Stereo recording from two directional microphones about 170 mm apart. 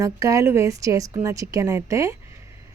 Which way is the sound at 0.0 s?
20° right (ahead or behind).